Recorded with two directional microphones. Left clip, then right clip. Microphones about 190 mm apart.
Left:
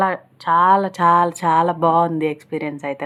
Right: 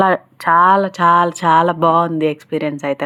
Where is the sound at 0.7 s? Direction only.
10° right (ahead or behind).